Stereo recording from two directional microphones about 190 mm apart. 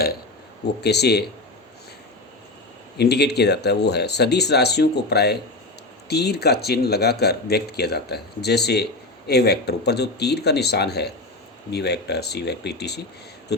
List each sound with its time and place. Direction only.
0.8 s speech: 60° left (ahead or behind)
3.0 s speech: 60° left (ahead or behind)